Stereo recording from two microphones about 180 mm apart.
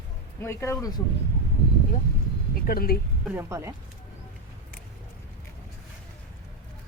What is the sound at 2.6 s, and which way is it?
Speech, 55° left (ahead or behind).